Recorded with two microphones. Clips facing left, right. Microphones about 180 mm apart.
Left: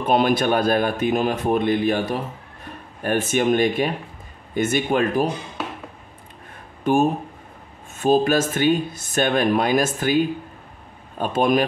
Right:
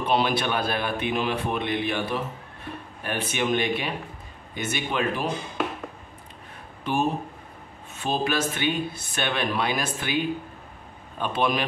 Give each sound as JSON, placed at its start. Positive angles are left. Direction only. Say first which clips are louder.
{"t": 0.0, "sound": "speech", "louder": "left 5 dB", "side_deg": 45}
{"t": 6.8, "sound": "speech", "louder": "left 7 dB", "side_deg": 50}